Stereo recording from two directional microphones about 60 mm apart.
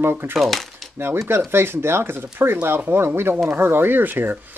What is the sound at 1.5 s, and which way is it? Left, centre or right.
Speech, right.